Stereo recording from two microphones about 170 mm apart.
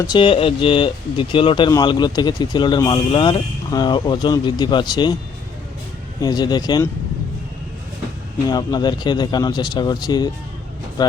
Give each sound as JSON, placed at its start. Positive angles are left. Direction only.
{"t": 0.1, "sound": "speech", "side_deg": 30}
{"t": 6.1, "sound": "speech", "side_deg": 25}
{"t": 8.4, "sound": "speech", "side_deg": 25}